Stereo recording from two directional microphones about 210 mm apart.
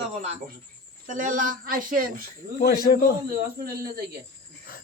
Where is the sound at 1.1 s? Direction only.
40° right (ahead or behind).